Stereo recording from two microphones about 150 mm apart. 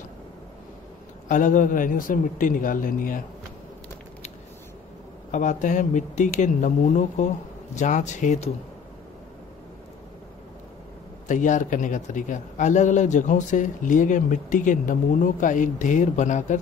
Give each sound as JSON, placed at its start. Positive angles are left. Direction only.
{"t": 1.3, "sound": "a man's voice", "side_deg": 60}
{"t": 5.3, "sound": "a man's voice", "side_deg": 55}
{"t": 11.2, "sound": "a man's voice", "side_deg": 55}